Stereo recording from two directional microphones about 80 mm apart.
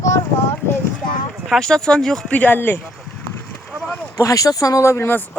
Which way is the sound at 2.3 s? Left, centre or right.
Left.